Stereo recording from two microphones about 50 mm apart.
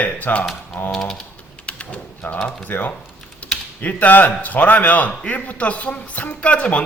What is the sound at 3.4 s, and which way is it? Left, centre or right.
Typing, left.